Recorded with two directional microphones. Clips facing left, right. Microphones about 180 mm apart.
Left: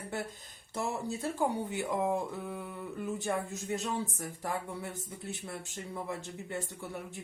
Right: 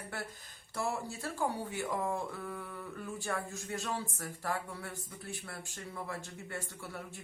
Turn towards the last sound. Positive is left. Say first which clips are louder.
# left 4 dB
turn(degrees=20)  # may be behind; listen again after turning